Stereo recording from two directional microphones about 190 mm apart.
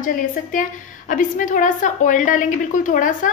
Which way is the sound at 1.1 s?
45° left (ahead or behind).